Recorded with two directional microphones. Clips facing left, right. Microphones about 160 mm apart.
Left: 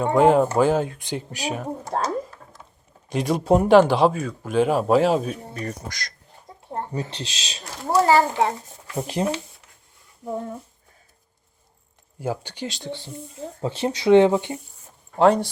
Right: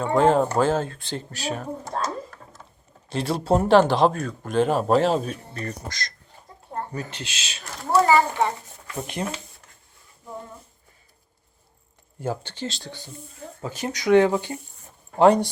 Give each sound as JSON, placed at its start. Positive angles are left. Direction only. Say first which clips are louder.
{"t": 0.0, "sound": "speech", "louder": "left 2 dB", "side_deg": 15}
{"t": 3.1, "sound": "speech", "louder": "left 3 dB", "side_deg": 15}
{"t": 6.7, "sound": "speech", "louder": "left 2 dB", "side_deg": 30}
{"t": 12.2, "sound": "speech", "louder": "left 1 dB", "side_deg": 10}
{"t": 13.6, "sound": "speech", "louder": "left 5 dB", "side_deg": 30}
{"t": 15.2, "sound": "speech", "louder": "right 1 dB", "side_deg": 0}